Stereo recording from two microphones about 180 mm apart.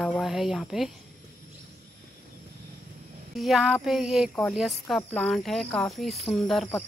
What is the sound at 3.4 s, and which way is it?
Speech, centre (ahead or behind).